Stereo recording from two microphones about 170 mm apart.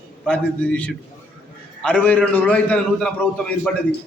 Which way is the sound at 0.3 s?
5° left (ahead or behind).